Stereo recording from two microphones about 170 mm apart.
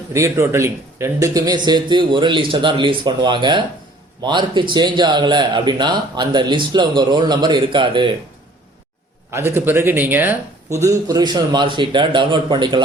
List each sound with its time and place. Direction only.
0.1 s a man's voice: 15° right (ahead or behind)
9.3 s a man's voice: 15° right (ahead or behind)